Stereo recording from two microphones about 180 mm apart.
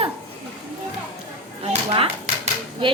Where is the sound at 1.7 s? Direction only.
35° right (ahead or behind).